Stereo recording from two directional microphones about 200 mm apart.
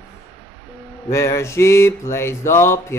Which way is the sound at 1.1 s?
15° left (ahead or behind).